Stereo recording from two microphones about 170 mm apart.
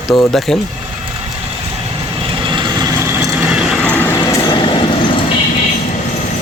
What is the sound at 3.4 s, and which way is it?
Train, 5° right (ahead or behind).